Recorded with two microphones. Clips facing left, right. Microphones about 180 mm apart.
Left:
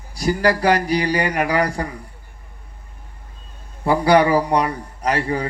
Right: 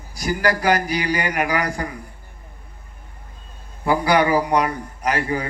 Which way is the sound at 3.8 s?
30° left (ahead or behind).